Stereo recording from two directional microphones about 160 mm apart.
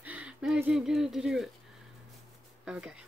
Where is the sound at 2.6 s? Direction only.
5° right (ahead or behind).